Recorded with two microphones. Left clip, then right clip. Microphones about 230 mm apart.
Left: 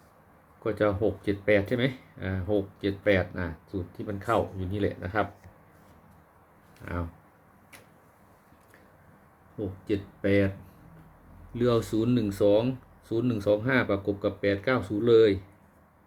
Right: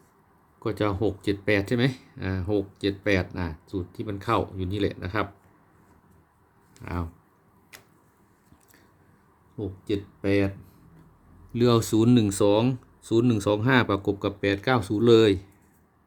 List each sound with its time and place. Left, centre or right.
0.6 s speech: right
9.9 s speech: right
11.5 s speech: right